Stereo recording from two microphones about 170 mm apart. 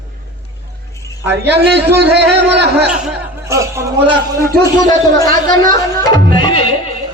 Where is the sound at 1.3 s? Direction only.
90° right.